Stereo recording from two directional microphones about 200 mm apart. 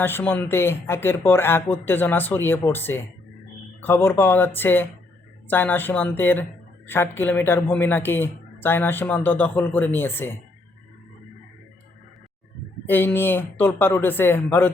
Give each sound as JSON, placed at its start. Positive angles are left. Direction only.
{"t": 0.0, "sound": "a man's voice", "side_deg": 10}
{"t": 12.9, "sound": "a man's voice", "side_deg": 10}